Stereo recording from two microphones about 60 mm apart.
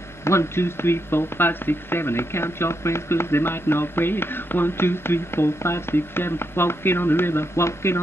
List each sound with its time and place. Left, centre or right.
0.2 s speech: left